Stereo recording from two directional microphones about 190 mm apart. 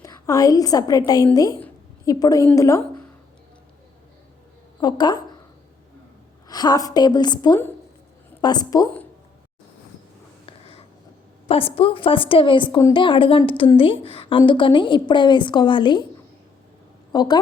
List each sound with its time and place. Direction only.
0.0 s a woman's voice: 20° left (ahead or behind)
4.8 s a woman's voice: 20° left (ahead or behind)
6.5 s a woman's voice: 20° left (ahead or behind)
10.4 s writing: 30° left (ahead or behind)
11.4 s a woman's voice: 30° left (ahead or behind)
17.1 s a woman's voice: 20° left (ahead or behind)